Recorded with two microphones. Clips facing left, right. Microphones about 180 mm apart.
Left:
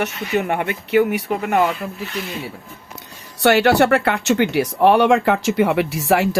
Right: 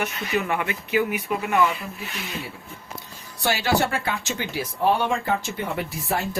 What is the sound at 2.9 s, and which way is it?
Speech, 70° left (ahead or behind).